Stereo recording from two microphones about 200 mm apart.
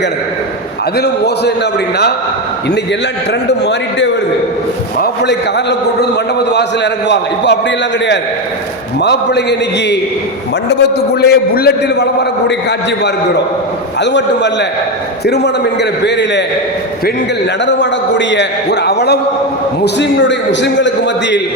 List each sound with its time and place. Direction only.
0.9 s a man's voice: 55° left (ahead or behind)
4.9 s a man's voice: 60° left (ahead or behind)
9.0 s a man's voice: 60° left (ahead or behind)
14.0 s a man's voice: 60° left (ahead or behind)
18.3 s a man's voice: 60° left (ahead or behind)